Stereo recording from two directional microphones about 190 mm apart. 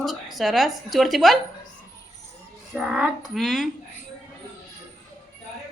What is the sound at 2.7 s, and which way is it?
Speech, 5° right (ahead or behind).